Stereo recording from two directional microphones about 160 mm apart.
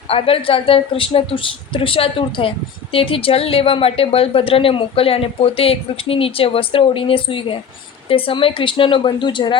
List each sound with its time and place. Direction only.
0.1 s a woman's voice: 35° left (ahead or behind)